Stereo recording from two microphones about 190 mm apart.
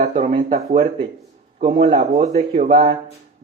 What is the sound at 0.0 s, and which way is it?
Speech, 35° right (ahead or behind).